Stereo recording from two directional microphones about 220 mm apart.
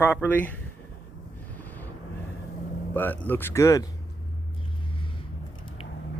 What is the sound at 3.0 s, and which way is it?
Speech, 10° left (ahead or behind).